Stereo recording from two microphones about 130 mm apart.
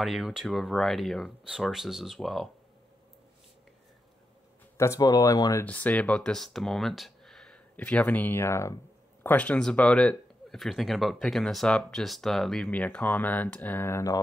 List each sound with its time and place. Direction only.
0.0 s speech: 5° right (ahead or behind)
4.7 s speech: 25° left (ahead or behind)
5.7 s speech: 10° left (ahead or behind)